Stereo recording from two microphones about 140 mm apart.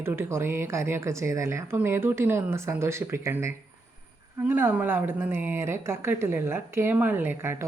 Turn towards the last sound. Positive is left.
turn(degrees=-15)  # may be behind; listen again after turning